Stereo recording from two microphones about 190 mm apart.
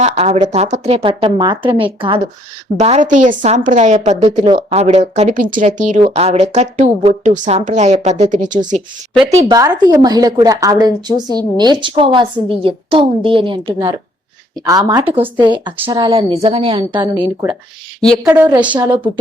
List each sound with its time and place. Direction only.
0.0 s a woman's voice: 35° right (ahead or behind)
9.2 s a woman's voice: 20° right (ahead or behind)
18.2 s a woman's voice: 15° right (ahead or behind)